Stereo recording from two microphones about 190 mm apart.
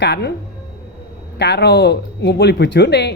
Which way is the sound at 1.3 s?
60° left (ahead or behind).